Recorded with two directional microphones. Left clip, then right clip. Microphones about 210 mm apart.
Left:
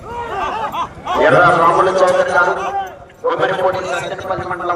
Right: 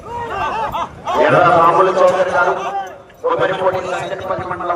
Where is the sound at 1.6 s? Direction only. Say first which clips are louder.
Right 1 dB; 40° left (ahead or behind).